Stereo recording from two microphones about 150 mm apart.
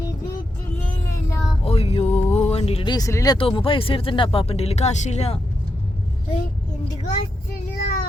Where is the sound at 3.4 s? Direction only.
35° left (ahead or behind).